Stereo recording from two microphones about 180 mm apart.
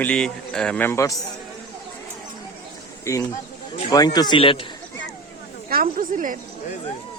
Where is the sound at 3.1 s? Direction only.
15° left (ahead or behind).